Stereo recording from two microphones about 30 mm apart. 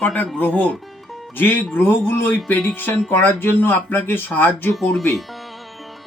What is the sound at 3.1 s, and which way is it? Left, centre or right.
Speech, left.